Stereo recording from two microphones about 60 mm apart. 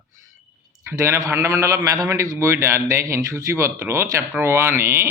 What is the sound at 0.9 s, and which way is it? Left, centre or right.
A man's voice, right.